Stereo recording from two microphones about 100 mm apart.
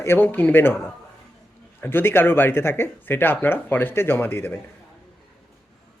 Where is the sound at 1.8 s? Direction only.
20° left (ahead or behind).